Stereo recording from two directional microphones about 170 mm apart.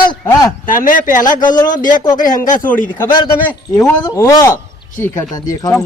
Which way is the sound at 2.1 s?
50° left (ahead or behind).